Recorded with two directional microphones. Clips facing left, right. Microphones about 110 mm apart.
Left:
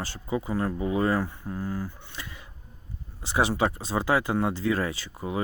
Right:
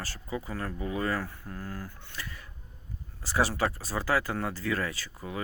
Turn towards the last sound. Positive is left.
turn(degrees=25)  # may be behind; listen again after turning